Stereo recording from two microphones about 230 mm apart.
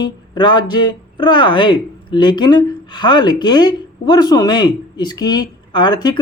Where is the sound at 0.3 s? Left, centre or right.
Centre.